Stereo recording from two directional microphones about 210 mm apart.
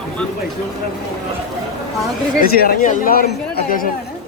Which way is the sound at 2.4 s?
45° left (ahead or behind).